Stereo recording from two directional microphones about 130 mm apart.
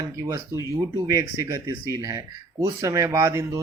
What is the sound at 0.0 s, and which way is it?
Speech, 25° right (ahead or behind).